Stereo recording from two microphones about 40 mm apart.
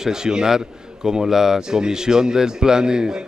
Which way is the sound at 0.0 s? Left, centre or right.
Centre.